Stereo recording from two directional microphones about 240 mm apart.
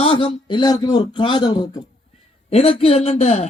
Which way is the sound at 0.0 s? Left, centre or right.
Left.